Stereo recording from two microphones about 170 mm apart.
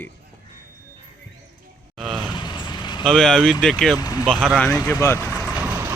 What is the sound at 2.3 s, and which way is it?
Vehicle, 25° left (ahead or behind).